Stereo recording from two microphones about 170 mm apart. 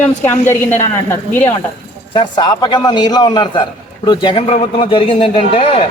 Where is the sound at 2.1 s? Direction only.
25° left (ahead or behind).